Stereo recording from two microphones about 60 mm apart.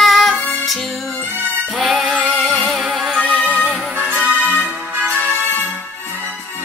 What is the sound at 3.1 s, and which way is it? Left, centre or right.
Music, centre.